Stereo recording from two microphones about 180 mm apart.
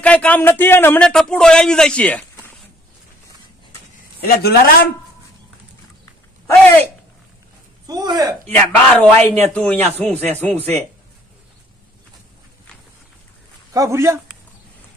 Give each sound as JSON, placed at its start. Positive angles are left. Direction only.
{"t": 0.0, "sound": "a man's voice", "side_deg": 5}
{"t": 4.4, "sound": "speech", "side_deg": 60}
{"t": 6.4, "sound": "a man's voice", "side_deg": 10}
{"t": 7.8, "sound": "speech", "side_deg": -20}
{"t": 8.5, "sound": "a man's voice", "side_deg": 10}
{"t": 13.7, "sound": "a man's voice", "side_deg": -15}